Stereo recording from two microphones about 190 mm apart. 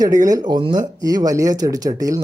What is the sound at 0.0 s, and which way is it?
Speech, 20° right (ahead or behind).